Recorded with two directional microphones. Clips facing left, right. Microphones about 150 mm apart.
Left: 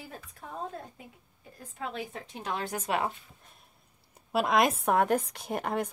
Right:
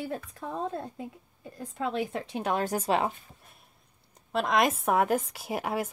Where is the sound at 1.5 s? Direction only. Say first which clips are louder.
Right 6 dB; 90° right; by 2.6 s 60° right (ahead or behind).